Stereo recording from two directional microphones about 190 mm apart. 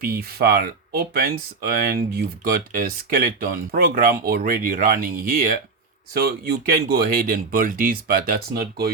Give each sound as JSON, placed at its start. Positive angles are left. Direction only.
{"t": 0.0, "sound": "speech", "side_deg": -50}